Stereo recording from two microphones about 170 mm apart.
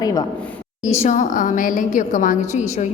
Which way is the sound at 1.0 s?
45° left (ahead or behind).